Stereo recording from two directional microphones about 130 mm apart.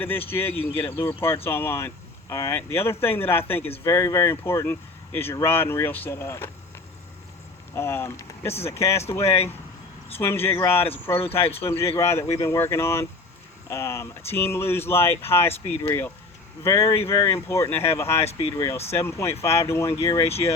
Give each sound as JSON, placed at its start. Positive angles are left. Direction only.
{"t": 0.0, "sound": "speech", "side_deg": 15}
{"t": 7.8, "sound": "speech", "side_deg": 20}